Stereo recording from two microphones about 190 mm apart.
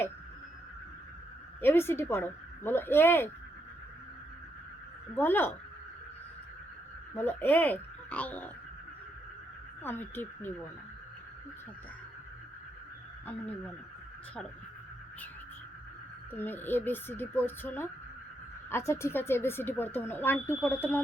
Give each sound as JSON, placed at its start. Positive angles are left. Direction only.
{"t": 1.6, "sound": "speech", "side_deg": 10}
{"t": 5.1, "sound": "speech", "side_deg": 10}
{"t": 7.1, "sound": "speech", "side_deg": 10}
{"t": 9.8, "sound": "speech", "side_deg": 10}
{"t": 13.2, "sound": "speech", "side_deg": 10}
{"t": 16.3, "sound": "speech", "side_deg": 10}